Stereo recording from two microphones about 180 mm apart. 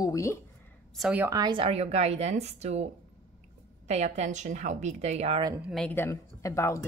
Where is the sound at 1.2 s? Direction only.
20° right (ahead or behind); by 2.8 s 35° right (ahead or behind).